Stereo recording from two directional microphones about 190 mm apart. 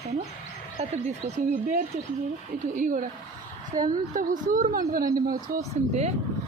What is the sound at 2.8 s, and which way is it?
A woman's voice, 40° right (ahead or behind).